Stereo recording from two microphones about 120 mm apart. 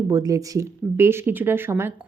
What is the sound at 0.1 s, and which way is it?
A woman's voice, 30° right (ahead or behind).